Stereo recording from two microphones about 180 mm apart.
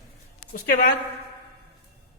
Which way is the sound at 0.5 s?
50° left (ahead or behind).